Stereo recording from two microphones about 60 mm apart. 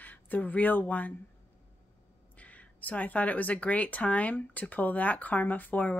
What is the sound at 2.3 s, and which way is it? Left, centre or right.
Speech, left.